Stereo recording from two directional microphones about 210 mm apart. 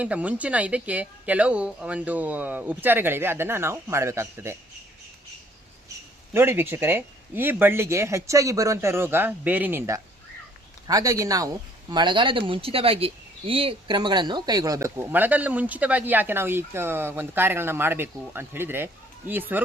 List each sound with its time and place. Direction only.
0.0 s speech: 5° right (ahead or behind)
6.3 s speech: 10° right (ahead or behind)